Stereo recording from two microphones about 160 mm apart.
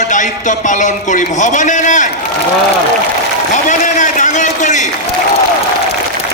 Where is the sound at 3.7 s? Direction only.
50° left (ahead or behind).